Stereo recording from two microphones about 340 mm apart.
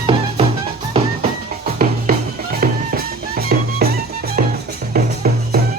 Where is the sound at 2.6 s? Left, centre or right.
Right.